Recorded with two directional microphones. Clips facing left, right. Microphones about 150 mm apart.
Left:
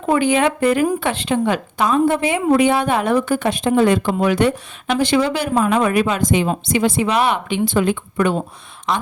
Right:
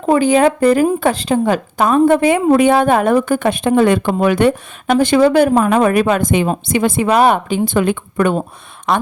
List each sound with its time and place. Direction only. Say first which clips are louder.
0.0 s a woman's voice: right 4 dB; 35° right (ahead or behind); by 9.0 s 55° right (ahead or behind)